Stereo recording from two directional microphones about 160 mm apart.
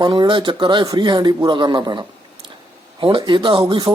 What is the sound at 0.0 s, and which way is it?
Speech, 30° right (ahead or behind).